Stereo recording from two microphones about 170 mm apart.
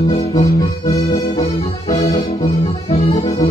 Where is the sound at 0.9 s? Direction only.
40° left (ahead or behind).